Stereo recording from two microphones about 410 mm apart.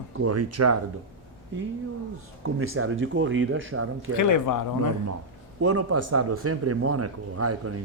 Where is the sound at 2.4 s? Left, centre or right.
Right.